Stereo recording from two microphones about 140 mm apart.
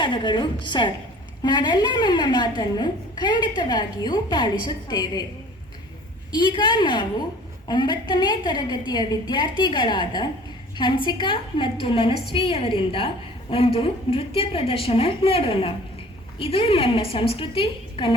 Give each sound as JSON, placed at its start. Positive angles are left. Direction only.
{"t": 0.0, "sound": "a woman's voice", "side_deg": 35}
{"t": 6.3, "sound": "a woman's voice", "side_deg": 35}